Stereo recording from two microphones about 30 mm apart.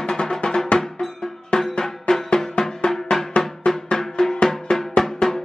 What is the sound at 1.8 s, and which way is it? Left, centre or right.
Music, centre.